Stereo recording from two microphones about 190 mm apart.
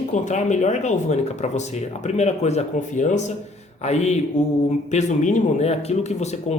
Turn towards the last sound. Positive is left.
turn(degrees=35)  # may be behind; listen again after turning